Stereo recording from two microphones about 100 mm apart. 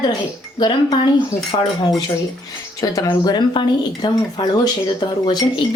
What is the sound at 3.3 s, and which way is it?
Speech, 50° left (ahead or behind).